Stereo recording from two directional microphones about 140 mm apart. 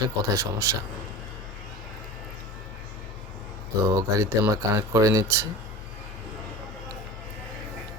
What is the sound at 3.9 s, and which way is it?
Speech, 20° right (ahead or behind).